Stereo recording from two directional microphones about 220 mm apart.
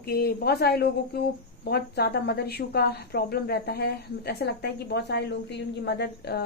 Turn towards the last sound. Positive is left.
turn(degrees=50)  # may be behind; listen again after turning